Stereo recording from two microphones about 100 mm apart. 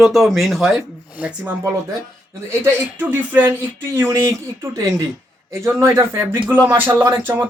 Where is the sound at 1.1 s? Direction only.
15° right (ahead or behind).